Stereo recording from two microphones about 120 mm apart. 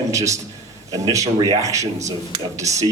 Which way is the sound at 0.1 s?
25° right (ahead or behind).